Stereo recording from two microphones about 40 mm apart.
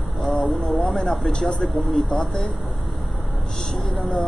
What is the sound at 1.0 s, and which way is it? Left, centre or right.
Speech, centre.